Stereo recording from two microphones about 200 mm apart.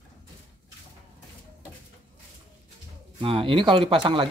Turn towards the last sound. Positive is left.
turn(degrees=-25)  # may be behind; listen again after turning